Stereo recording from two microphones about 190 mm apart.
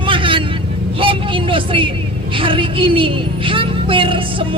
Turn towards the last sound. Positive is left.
turn(degrees=-25)  # may be behind; listen again after turning